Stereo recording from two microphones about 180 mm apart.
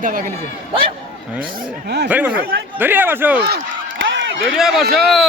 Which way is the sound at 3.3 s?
65° right (ahead or behind).